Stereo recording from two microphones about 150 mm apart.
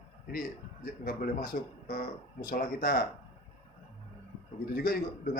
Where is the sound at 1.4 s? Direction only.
70° left (ahead or behind).